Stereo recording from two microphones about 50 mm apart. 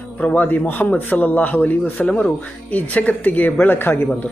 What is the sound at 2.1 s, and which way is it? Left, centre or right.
A man's voice, left.